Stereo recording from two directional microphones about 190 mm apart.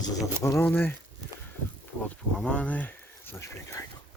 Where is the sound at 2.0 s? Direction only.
5° left (ahead or behind).